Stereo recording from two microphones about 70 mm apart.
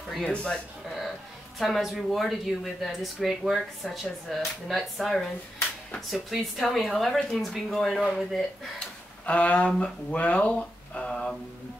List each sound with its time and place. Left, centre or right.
0.2 s speech: centre
1.6 s speech: centre
8.7 s a sound: centre
10.1 s speech: left
10.5 s mantra: centre